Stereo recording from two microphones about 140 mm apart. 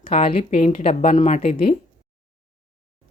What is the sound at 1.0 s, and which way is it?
Speech, 60° left (ahead or behind).